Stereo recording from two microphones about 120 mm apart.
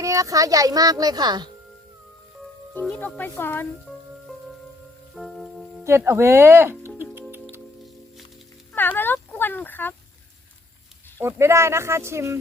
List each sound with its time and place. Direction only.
0.0 s speech: 30° right (ahead or behind)
3.0 s speech: 15° left (ahead or behind)
5.1 s music: centre (ahead or behind)
6.0 s music: 20° right (ahead or behind)
8.7 s a sound: 15° left (ahead or behind)
11.2 s speech: 20° right (ahead or behind)